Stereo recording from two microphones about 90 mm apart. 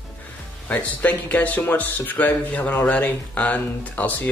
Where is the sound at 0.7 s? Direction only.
15° left (ahead or behind).